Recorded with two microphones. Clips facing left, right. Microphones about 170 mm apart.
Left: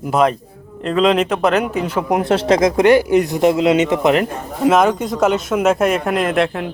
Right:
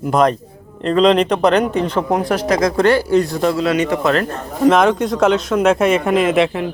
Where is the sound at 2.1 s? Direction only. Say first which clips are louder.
Left 4 dB; 25° left (ahead or behind).